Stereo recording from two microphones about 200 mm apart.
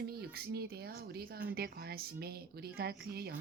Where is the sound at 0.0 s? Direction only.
50° right (ahead or behind).